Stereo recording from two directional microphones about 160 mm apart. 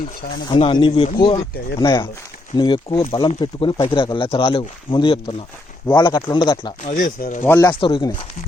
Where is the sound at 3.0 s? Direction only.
35° left (ahead or behind).